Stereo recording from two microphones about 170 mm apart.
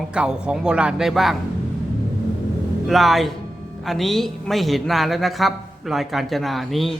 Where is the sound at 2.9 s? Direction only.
Centre (ahead or behind).